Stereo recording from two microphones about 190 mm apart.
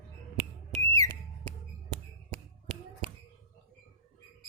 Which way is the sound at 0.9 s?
20° left (ahead or behind).